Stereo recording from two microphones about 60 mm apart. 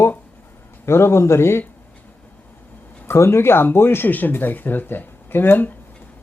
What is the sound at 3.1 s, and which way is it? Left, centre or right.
Speech, left.